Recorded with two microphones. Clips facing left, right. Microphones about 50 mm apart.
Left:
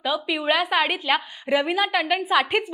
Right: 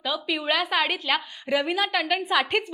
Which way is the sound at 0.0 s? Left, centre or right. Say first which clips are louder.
Left 3 dB; centre.